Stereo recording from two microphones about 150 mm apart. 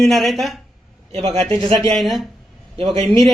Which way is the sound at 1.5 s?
35° right (ahead or behind).